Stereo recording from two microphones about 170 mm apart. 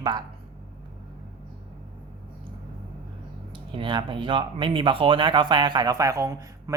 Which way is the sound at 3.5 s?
30° right (ahead or behind).